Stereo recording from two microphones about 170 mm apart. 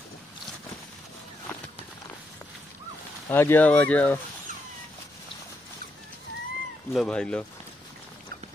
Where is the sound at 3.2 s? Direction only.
15° left (ahead or behind).